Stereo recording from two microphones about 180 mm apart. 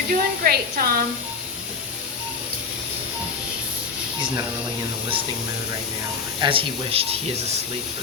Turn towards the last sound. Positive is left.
turn(degrees=-30)  # may be behind; listen again after turning